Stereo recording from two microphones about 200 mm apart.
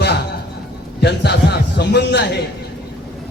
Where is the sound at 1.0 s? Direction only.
55° left (ahead or behind).